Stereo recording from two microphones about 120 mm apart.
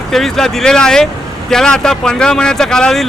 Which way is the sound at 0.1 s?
5° left (ahead or behind).